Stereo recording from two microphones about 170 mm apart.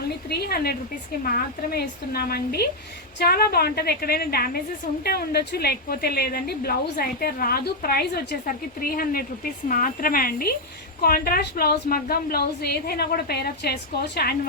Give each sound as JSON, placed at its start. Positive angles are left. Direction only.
{"t": 0.3, "sound": "a woman's voice", "side_deg": 70}